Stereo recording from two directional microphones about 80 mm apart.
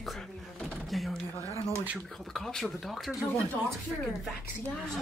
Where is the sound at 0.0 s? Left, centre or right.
Centre.